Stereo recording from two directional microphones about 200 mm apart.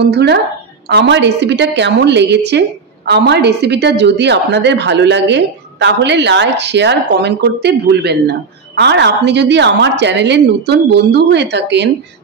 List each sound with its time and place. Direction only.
0.0 s a woman's voice: 55° right (ahead or behind)